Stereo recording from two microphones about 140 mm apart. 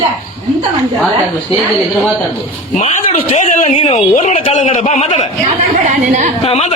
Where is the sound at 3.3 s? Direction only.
50° left (ahead or behind).